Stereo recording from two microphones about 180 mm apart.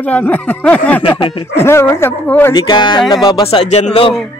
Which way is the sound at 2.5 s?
25° left (ahead or behind).